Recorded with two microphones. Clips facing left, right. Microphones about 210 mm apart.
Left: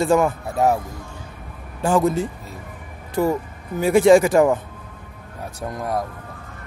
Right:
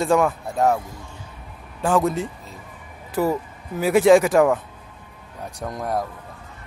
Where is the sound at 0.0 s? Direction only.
Centre (ahead or behind).